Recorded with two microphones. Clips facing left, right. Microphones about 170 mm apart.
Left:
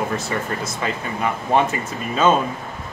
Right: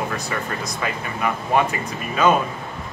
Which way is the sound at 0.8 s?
25° left (ahead or behind).